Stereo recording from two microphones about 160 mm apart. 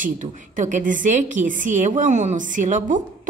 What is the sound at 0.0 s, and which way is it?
A woman's voice, 55° right (ahead or behind).